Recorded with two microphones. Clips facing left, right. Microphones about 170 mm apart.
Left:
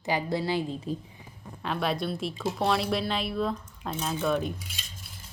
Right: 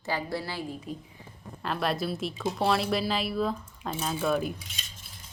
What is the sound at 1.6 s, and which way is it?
Speech, centre (ahead or behind).